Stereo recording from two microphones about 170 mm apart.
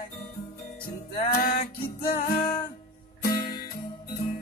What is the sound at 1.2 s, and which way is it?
Music, 60° left (ahead or behind).